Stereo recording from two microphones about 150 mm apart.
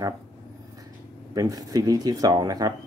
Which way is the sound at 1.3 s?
25° right (ahead or behind).